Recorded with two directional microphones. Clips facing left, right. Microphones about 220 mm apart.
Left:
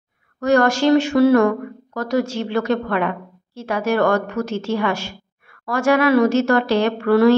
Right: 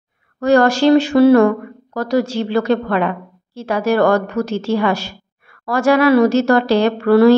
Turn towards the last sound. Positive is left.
turn(degrees=-35)  # may be behind; listen again after turning